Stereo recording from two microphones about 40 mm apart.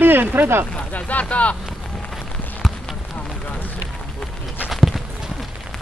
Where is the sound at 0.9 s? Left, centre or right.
Left.